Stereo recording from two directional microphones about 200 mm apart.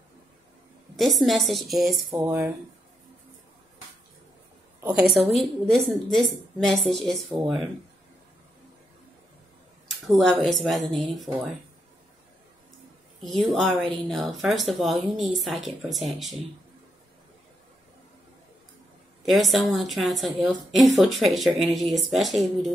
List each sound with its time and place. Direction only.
1.2 s a woman's voice: centre (ahead or behind)
2.0 s speech: 15° right (ahead or behind)
4.8 s a woman's voice: 5° right (ahead or behind)
9.8 s a woman's voice: centre (ahead or behind)
13.2 s a woman's voice: centre (ahead or behind)
19.2 s a woman's voice: centre (ahead or behind)